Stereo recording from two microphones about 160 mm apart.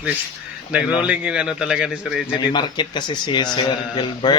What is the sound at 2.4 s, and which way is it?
Speech, 30° left (ahead or behind).